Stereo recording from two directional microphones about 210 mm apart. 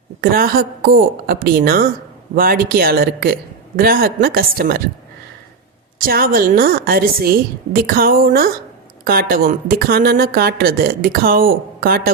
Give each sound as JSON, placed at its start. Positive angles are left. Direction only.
{"t": 0.2, "sound": "a woman's voice", "side_deg": -45}
{"t": 6.0, "sound": "a woman's voice", "side_deg": -45}